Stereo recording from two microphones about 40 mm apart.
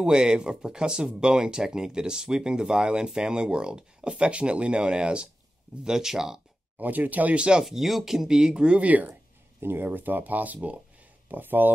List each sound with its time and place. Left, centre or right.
0.0 s speech: centre
5.9 s speech: centre
6.8 s speech: right
7.3 s speech: right
7.6 s speech: centre
8.5 s speech: right
8.8 s speech: right
9.6 s speech: right
11.2 s speech: right